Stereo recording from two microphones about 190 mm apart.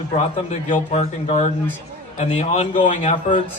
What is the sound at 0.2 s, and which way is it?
A man's voice, 35° left (ahead or behind).